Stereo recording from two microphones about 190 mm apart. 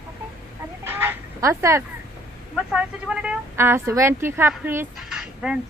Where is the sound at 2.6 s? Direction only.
5° right (ahead or behind).